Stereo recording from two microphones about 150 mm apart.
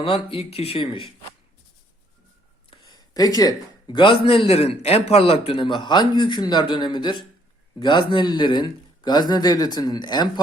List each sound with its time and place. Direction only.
0.0 s a man's voice: 40° left (ahead or behind)
2.6 s a man's voice: 30° left (ahead or behind)